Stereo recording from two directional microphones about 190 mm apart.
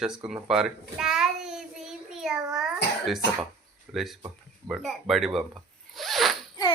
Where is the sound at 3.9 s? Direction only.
Centre (ahead or behind).